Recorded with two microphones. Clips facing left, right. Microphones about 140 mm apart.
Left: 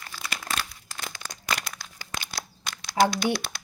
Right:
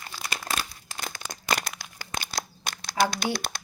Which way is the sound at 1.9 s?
45° right (ahead or behind).